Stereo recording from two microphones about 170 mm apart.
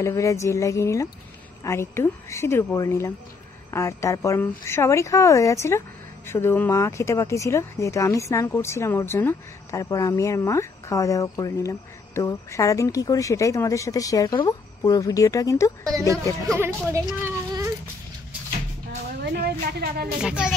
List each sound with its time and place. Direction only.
0.0 s speech: 15° left (ahead or behind)
16.5 s speech: 15° right (ahead or behind)
19.2 s music: 70° right (ahead or behind)
20.2 s speech: 5° right (ahead or behind)